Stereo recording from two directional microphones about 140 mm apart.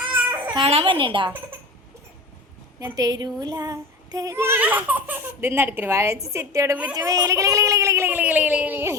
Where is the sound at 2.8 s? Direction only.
25° right (ahead or behind).